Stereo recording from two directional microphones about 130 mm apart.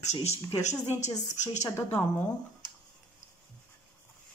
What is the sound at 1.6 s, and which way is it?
Speech, 20° left (ahead or behind).